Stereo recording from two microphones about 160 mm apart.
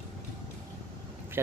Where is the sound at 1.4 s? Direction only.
15° right (ahead or behind).